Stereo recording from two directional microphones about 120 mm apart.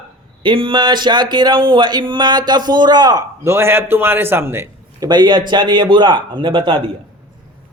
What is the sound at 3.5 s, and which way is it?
A man's voice, 20° right (ahead or behind).